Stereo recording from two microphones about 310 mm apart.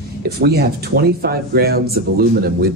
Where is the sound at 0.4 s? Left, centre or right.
Right.